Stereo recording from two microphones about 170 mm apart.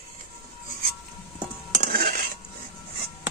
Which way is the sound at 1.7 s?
65° right (ahead or behind).